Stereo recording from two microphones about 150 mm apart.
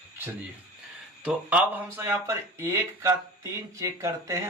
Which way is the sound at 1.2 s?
5° right (ahead or behind).